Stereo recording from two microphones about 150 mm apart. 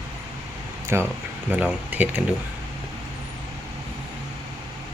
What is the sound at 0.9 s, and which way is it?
Speech, 15° right (ahead or behind).